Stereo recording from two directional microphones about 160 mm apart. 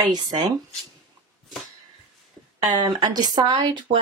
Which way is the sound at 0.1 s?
25° right (ahead or behind).